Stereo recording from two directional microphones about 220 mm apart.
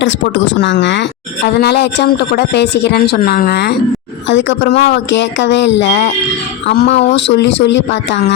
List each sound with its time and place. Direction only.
0.0 s speech: 55° left (ahead or behind)
6.8 s speech: 30° left (ahead or behind)
7.1 s speech: 50° left (ahead or behind)